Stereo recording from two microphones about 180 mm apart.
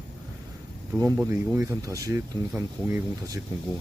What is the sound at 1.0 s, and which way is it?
Speech, 15° right (ahead or behind).